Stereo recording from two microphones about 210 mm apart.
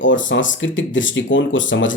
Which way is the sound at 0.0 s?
65° left (ahead or behind).